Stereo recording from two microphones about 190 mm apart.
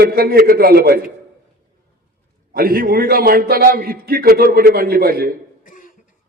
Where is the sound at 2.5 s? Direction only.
50° right (ahead or behind).